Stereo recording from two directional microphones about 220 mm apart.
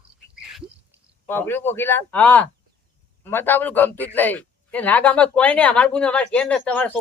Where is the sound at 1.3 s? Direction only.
10° left (ahead or behind).